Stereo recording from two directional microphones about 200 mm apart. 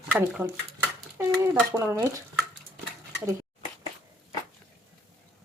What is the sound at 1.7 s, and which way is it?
Speech, 15° right (ahead or behind).